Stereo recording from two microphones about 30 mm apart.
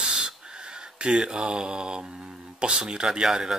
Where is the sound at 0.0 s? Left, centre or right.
Right.